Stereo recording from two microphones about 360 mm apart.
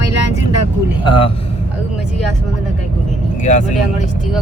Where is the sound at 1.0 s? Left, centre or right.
Centre.